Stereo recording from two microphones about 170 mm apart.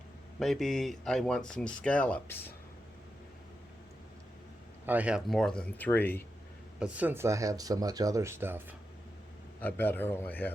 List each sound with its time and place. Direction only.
0.3 s speech: centre (ahead or behind)
4.9 s speech: 10° right (ahead or behind); by 6.2 s 10° left (ahead or behind)
6.7 s speech: 5° right (ahead or behind)
9.6 s a man's voice: 10° left (ahead or behind)